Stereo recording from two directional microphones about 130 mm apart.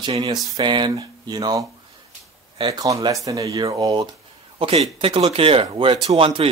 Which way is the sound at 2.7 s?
25° right (ahead or behind).